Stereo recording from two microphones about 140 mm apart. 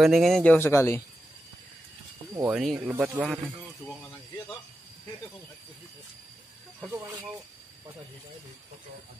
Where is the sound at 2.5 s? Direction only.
5° right (ahead or behind).